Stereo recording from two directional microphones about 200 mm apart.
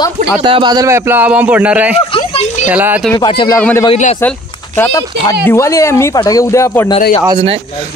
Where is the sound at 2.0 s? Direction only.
25° left (ahead or behind).